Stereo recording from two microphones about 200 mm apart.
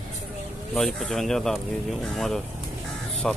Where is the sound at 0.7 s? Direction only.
Centre (ahead or behind).